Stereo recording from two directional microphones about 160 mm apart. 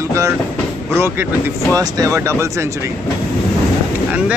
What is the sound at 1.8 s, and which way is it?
Speech, 20° right (ahead or behind).